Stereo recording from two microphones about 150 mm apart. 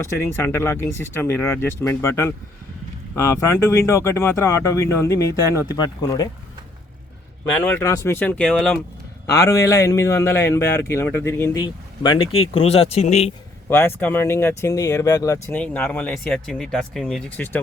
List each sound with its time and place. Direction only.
0.4 s a man's voice: 15° left (ahead or behind)
7.5 s speech: 10° left (ahead or behind)
9.2 s a man's voice: 20° left (ahead or behind)
11.6 s speech: 30° left (ahead or behind); by 13.3 s 45° left (ahead or behind)
13.7 s speech: 15° left (ahead or behind)
15.5 s speech: 10° left (ahead or behind)